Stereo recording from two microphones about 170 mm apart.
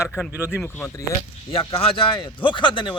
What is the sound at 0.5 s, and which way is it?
Speech, 10° left (ahead or behind).